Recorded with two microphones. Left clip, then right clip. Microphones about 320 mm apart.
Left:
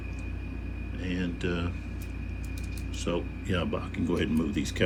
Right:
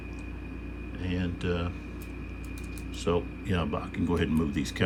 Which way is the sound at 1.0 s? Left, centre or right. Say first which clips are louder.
Even; centre.